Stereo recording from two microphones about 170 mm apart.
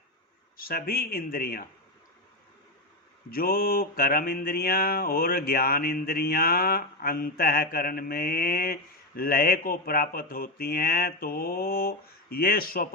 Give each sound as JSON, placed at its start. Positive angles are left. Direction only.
{"t": 0.5, "sound": "mantra", "side_deg": 60}
{"t": 3.2, "sound": "mantra", "side_deg": 60}